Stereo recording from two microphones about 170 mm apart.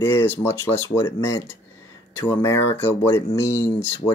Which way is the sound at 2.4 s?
15° left (ahead or behind).